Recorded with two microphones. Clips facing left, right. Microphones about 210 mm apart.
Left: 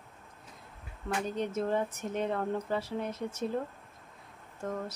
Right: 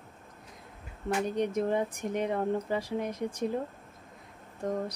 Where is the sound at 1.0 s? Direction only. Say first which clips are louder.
Right 4 dB; 15° right (ahead or behind).